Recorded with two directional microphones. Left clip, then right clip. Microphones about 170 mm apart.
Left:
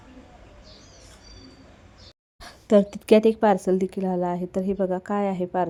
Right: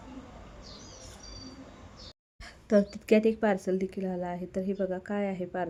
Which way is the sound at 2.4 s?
25° left (ahead or behind).